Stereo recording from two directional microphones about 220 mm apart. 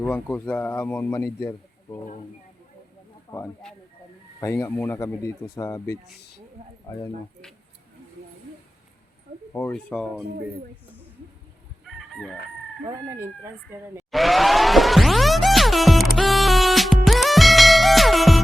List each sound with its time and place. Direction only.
0.0 s a man's voice: 5° left (ahead or behind)
3.3 s a man's voice: 5° left (ahead or behind)
9.5 s speech: 10° left (ahead or behind)
11.9 s chicken: centre (ahead or behind)
12.8 s speech: 10° right (ahead or behind)
14.1 s music: centre (ahead or behind)